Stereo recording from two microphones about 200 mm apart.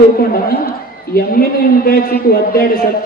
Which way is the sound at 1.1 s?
50° left (ahead or behind).